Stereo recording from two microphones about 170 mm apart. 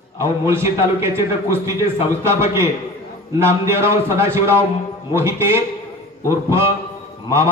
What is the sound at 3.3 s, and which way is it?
A man's voice, 15° right (ahead or behind).